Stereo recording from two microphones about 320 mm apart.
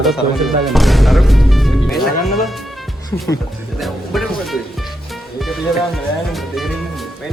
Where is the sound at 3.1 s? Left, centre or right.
Centre.